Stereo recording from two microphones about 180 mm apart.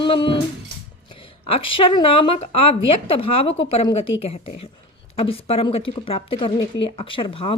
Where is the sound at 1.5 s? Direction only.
30° left (ahead or behind).